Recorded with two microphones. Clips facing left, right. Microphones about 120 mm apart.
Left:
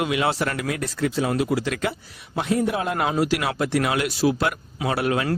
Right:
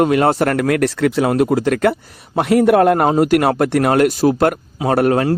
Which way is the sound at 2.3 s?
70° right (ahead or behind).